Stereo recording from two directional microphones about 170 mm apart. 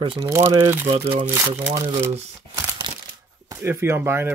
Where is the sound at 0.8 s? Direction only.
35° right (ahead or behind).